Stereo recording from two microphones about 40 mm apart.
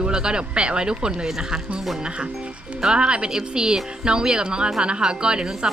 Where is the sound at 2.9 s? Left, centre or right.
Right.